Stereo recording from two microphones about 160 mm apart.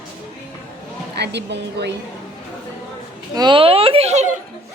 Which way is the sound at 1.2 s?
90° right.